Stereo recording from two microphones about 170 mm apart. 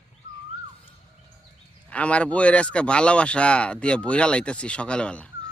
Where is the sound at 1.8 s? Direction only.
10° left (ahead or behind).